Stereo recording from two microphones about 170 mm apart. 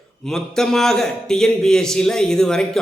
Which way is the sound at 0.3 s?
Centre (ahead or behind).